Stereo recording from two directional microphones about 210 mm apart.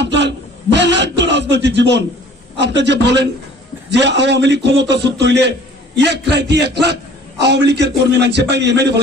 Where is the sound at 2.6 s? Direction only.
55° right (ahead or behind).